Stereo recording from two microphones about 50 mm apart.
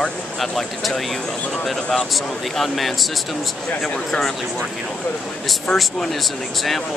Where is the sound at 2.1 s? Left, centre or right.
Centre.